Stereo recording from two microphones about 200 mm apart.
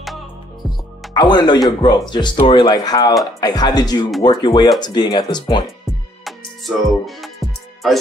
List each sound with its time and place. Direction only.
0.0 s music: centre (ahead or behind)
1.1 s speech: 20° left (ahead or behind)
6.2 s music: centre (ahead or behind)
7.8 s speech: centre (ahead or behind)